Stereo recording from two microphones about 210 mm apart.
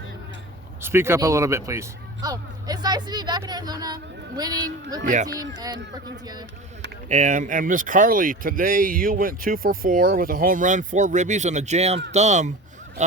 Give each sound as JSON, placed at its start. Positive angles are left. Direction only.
{"t": 0.8, "sound": "speech", "side_deg": -10}
{"t": 5.0, "sound": "speech", "side_deg": -35}
{"t": 5.4, "sound": "speech", "side_deg": -20}
{"t": 7.1, "sound": "speech", "side_deg": -35}